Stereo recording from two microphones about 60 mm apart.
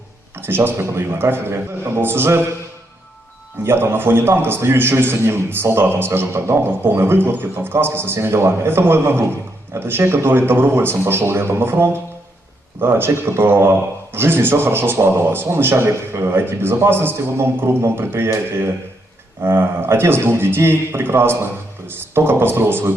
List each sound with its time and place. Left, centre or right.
0.3 s a man's voice: right
3.6 s speech: right